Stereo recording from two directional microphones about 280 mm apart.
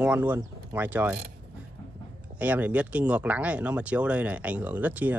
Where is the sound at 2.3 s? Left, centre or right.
Centre.